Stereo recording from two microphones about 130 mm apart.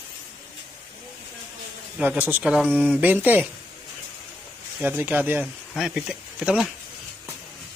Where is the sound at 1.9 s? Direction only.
10° right (ahead or behind).